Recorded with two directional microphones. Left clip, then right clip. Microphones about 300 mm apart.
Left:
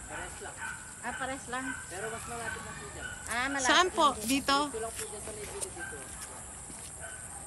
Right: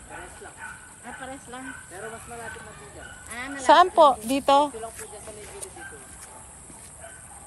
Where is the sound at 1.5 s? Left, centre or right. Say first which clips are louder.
Left 3 dB; left.